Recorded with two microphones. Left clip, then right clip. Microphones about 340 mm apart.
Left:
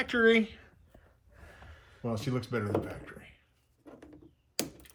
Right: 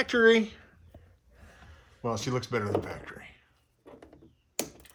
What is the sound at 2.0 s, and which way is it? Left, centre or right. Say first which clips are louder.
Speech: right 4 dB; right.